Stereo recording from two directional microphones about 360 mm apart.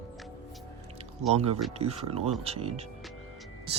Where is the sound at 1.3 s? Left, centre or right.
Centre.